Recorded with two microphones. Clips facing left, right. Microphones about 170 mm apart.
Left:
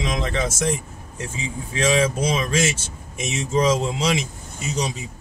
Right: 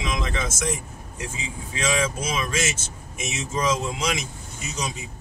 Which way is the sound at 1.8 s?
35° left (ahead or behind).